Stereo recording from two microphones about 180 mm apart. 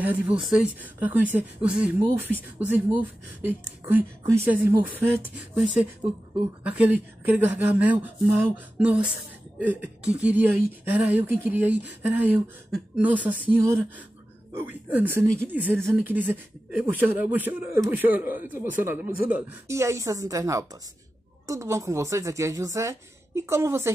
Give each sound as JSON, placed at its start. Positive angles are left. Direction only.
{"t": 0.0, "sound": "speech", "side_deg": -10}